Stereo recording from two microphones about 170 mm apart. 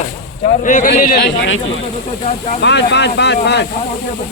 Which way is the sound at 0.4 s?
50° left (ahead or behind).